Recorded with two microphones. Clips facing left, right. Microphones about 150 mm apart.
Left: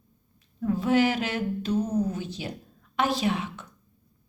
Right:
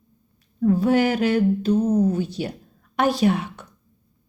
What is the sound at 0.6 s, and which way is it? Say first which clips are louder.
A woman's voice: right 5 dB; 40° right (ahead or behind).